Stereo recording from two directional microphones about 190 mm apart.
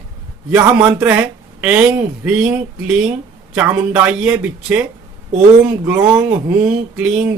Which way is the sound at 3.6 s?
5° right (ahead or behind).